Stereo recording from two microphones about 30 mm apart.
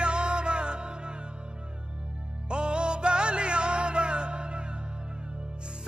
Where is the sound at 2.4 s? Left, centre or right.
Right.